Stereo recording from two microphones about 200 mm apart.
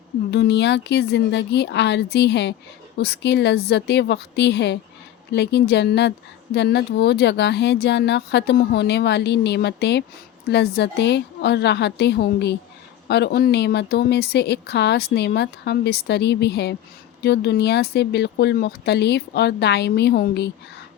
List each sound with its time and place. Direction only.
0.3 s speech: 60° left (ahead or behind)